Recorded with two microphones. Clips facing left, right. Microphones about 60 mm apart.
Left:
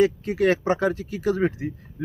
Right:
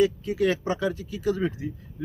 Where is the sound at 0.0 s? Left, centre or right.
Left.